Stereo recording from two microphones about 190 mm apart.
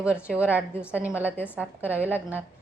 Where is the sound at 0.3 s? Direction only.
10° right (ahead or behind).